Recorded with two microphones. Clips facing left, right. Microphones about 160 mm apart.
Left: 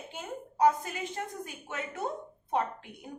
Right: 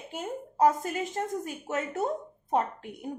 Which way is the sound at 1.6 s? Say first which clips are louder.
Right 6 dB; 40° right (ahead or behind).